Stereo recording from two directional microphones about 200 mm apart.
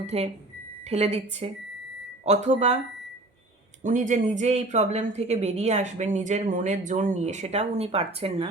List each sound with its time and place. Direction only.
0.0 s a woman's voice: 30° right (ahead or behind)
3.8 s a woman's voice: 40° right (ahead or behind)